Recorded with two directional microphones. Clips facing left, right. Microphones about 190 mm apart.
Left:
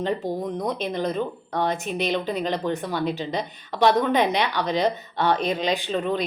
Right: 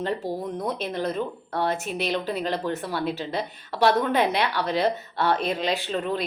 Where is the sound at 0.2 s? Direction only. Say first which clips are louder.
Left 2 dB; 5° right (ahead or behind).